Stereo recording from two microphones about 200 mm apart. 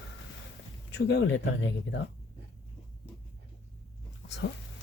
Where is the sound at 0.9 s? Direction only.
60° left (ahead or behind).